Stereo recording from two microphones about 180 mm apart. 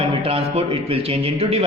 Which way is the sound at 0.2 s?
30° right (ahead or behind).